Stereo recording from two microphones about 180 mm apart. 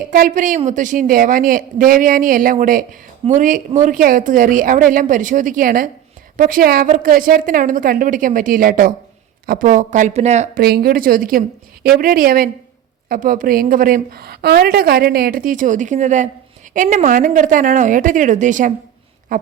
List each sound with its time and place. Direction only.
0.1 s a woman's voice: 45° right (ahead or behind)
10.6 s a woman's voice: 60° right (ahead or behind)